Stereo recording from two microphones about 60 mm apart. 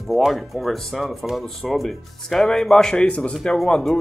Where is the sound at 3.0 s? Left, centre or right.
Left.